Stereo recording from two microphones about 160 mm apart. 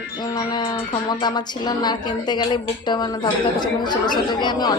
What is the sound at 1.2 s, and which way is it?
A woman's voice, 25° left (ahead or behind).